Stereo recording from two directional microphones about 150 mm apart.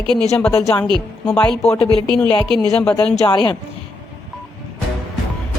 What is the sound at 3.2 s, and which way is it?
Speech, 30° left (ahead or behind).